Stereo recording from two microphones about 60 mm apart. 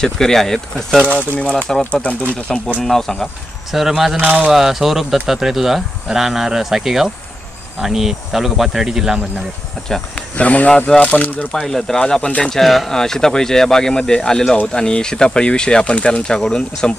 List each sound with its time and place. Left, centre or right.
0.0 s speech: centre
1.9 s speech: left
2.8 s speech: centre
3.7 s speech: centre
4.2 s speech: right
4.5 s speech: centre
9.8 s speech: centre
10.3 s speech: left
11.5 s speech: centre